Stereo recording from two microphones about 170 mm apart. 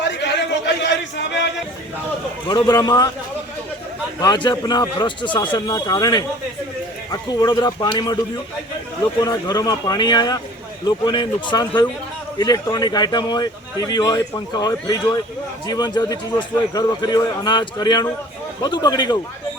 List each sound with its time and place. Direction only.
0.0 s a sound: 90° left
1.1 s music: 90° left
2.5 s speech: 25° left (ahead or behind)
4.2 s speech: 25° left (ahead or behind)
9.2 s speech: 25° left (ahead or behind)